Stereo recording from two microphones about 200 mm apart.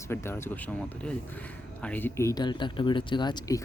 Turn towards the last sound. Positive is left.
turn(degrees=20)  # may be behind; listen again after turning